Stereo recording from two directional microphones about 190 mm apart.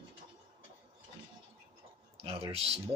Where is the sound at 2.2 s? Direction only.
30° right (ahead or behind).